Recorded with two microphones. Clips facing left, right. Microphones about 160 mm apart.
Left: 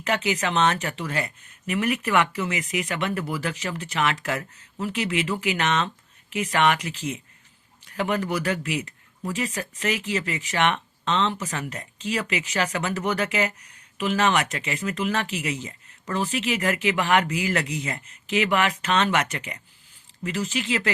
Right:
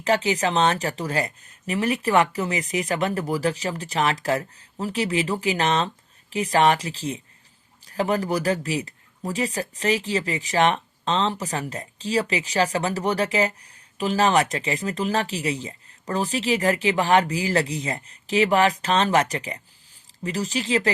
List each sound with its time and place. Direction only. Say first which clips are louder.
0.0 s speech: right 4 dB; 35° right (ahead or behind)